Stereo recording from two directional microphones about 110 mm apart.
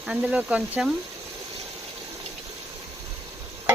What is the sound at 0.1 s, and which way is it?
Stir, 10° right (ahead or behind).